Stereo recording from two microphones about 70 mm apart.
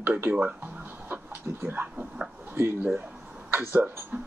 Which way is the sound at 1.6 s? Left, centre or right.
Right.